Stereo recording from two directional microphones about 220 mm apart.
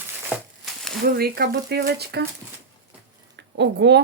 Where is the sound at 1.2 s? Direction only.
45° right (ahead or behind).